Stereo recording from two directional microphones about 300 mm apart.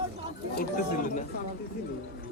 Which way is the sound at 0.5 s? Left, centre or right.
Left.